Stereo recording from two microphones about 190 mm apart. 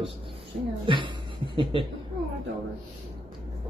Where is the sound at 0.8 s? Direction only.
25° right (ahead or behind).